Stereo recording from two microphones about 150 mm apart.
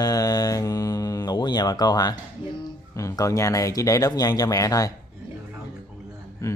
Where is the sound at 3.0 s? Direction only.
20° left (ahead or behind).